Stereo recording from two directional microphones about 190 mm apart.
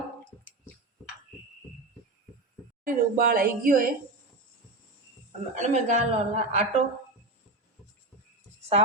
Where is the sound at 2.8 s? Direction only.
50° right (ahead or behind).